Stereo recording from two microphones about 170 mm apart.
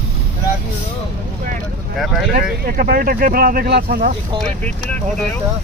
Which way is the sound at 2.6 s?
60° right (ahead or behind).